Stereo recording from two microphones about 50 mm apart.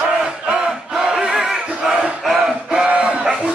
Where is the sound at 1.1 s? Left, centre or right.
Centre.